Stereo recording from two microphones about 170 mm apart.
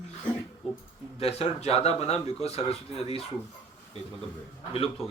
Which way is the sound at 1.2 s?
35° left (ahead or behind).